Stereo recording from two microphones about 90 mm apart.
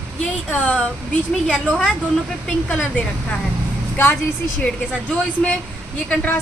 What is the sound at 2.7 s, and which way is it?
Speech, 10° left (ahead or behind).